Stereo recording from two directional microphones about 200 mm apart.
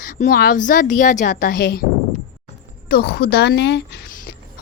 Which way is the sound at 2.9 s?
50° left (ahead or behind).